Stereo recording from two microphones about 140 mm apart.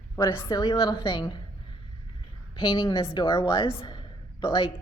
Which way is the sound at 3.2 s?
30° left (ahead or behind).